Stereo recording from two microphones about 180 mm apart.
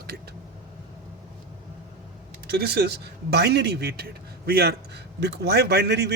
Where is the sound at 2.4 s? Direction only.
65° right (ahead or behind).